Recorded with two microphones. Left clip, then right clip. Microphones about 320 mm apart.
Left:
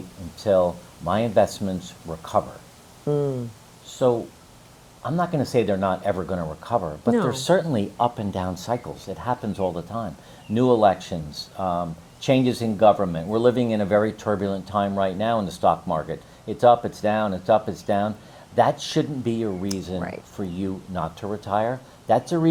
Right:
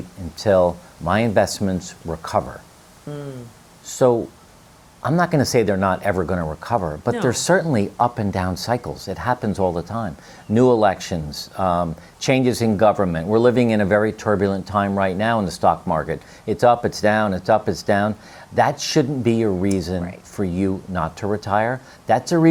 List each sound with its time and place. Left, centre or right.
0.4 s speech: right
3.1 s speech: left
3.9 s speech: right